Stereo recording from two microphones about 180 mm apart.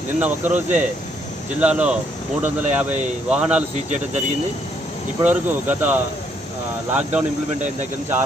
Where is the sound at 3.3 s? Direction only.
5° right (ahead or behind).